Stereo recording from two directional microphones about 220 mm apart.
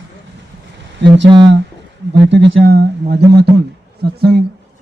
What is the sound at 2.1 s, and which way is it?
Speech, 50° right (ahead or behind).